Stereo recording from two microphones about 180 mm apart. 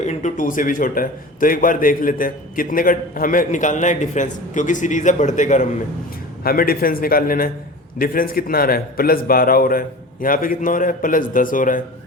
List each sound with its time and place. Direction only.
0.0 s a man's voice: 40° left (ahead or behind)
6.4 s a man's voice: 55° left (ahead or behind)